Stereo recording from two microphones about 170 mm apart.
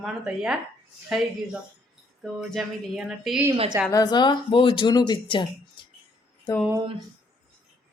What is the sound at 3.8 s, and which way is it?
Speech, 20° left (ahead or behind).